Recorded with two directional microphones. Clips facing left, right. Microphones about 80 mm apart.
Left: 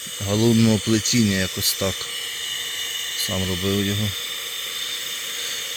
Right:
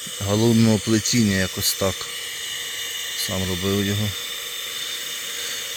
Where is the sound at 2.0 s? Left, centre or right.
Right.